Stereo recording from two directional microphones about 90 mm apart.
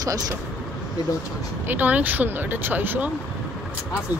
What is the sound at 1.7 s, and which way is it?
Speech, 20° right (ahead or behind).